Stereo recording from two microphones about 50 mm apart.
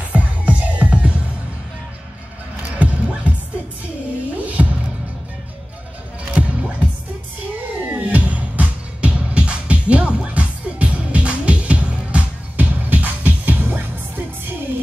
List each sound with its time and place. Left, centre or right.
0.1 s music: right
2.8 s music: right
4.4 s music: right
6.3 s music: right
7.9 s music: right